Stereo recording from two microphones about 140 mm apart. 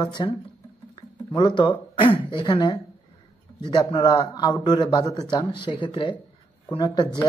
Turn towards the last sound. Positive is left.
turn(degrees=30)  # may be behind; listen again after turning